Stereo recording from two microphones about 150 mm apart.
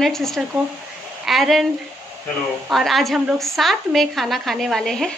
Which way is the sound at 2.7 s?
Centre (ahead or behind).